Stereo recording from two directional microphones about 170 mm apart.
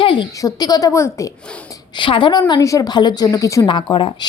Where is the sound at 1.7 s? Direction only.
30° left (ahead or behind).